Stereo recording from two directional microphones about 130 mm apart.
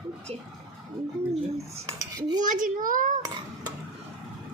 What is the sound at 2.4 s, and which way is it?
Speech, 90° right.